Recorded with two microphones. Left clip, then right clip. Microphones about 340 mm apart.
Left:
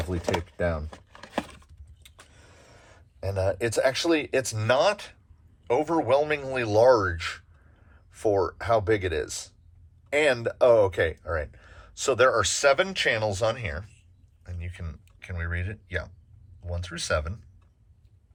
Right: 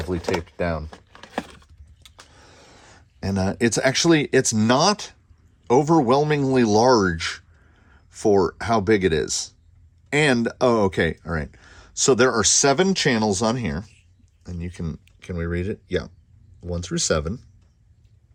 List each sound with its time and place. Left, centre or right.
0.0 s speech: centre
0.5 s speech: right
0.9 s a sound: centre
2.3 s speech: right